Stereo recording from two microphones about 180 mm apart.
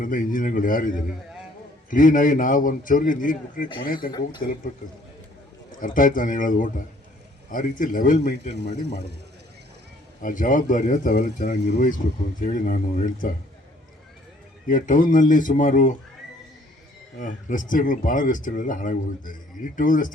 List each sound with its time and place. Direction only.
0.0 s speech: 50° left (ahead or behind)
5.8 s speech: 50° left (ahead or behind)
10.2 s speech: 45° left (ahead or behind)
14.7 s speech: 50° left (ahead or behind)
17.2 s speech: 45° left (ahead or behind)